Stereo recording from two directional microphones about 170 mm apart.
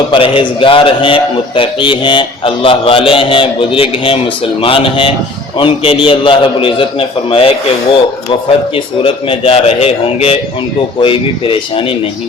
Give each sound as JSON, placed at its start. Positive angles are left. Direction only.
{"t": 0.1, "sound": "a man's voice", "side_deg": 30}
{"t": 8.7, "sound": "a man's voice", "side_deg": 35}